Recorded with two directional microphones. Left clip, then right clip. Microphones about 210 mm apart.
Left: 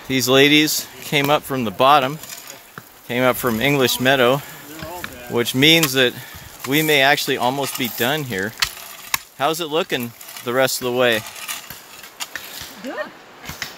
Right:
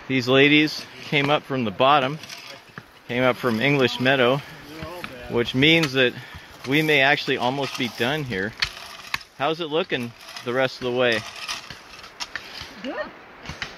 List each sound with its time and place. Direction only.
0.1 s speech: 10° left (ahead or behind)